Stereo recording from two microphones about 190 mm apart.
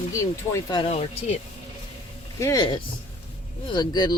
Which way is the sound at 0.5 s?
20° left (ahead or behind).